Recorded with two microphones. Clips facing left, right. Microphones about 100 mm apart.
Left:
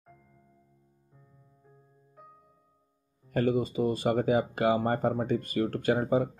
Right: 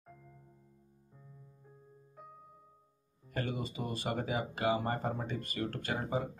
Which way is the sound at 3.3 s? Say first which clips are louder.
Left 11 dB; 45° left (ahead or behind).